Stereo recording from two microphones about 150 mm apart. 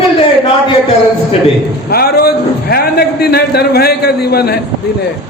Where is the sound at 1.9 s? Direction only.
90° left.